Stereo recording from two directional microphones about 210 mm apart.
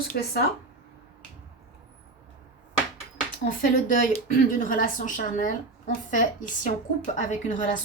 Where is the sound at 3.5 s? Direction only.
40° left (ahead or behind).